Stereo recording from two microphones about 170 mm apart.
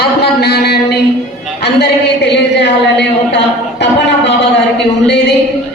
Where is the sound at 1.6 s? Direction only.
85° left.